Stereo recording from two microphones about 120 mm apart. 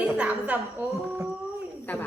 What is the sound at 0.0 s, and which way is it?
Speech, 10° right (ahead or behind).